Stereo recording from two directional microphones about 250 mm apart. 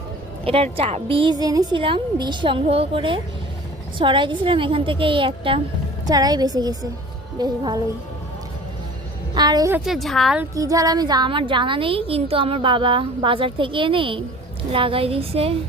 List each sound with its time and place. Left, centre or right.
0.4 s a woman's voice: right
9.3 s a woman's voice: centre
10.5 s a woman's voice: centre